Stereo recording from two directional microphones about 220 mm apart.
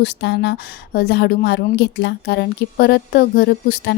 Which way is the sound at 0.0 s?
50° left (ahead or behind).